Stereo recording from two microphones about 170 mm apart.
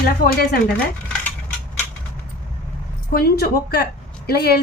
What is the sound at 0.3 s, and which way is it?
Speech, 65° left (ahead or behind).